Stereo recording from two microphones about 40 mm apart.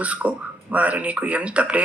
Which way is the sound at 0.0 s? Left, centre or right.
Right.